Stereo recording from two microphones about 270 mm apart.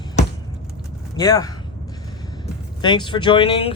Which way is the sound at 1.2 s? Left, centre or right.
Centre.